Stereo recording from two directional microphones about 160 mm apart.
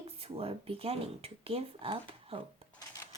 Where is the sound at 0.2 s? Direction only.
35° right (ahead or behind).